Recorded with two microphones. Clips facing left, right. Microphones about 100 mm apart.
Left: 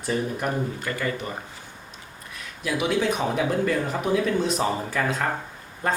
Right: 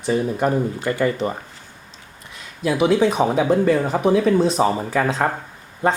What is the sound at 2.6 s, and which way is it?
Speech, 30° right (ahead or behind).